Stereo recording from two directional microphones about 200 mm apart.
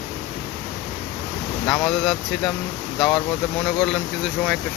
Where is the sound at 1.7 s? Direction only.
Centre (ahead or behind).